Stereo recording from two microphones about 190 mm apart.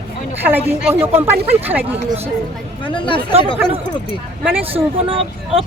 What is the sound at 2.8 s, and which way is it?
Speech, 25° left (ahead or behind).